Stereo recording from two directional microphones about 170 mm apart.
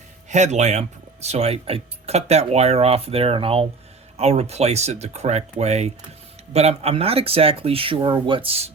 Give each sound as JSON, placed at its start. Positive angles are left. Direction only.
{"t": 0.3, "sound": "speech", "side_deg": -45}